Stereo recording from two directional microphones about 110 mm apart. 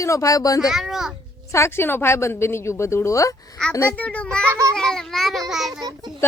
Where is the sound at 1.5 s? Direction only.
25° left (ahead or behind).